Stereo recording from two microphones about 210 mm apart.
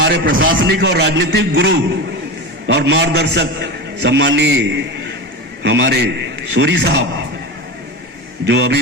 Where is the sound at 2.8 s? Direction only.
55° right (ahead or behind).